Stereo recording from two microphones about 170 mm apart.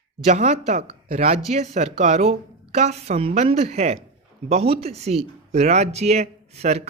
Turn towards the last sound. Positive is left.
turn(degrees=-40)  # may be behind; listen again after turning